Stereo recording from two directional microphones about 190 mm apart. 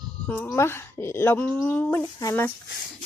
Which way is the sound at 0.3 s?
10° left (ahead or behind).